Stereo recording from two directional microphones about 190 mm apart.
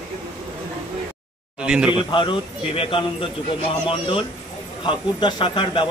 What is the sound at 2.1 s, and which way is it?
A man's voice, 25° left (ahead or behind).